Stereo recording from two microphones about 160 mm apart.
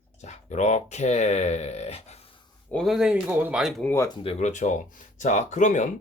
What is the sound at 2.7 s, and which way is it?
Speech, centre (ahead or behind).